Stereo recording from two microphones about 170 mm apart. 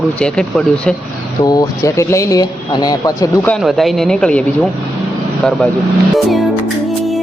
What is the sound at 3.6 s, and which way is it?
Speech, centre (ahead or behind).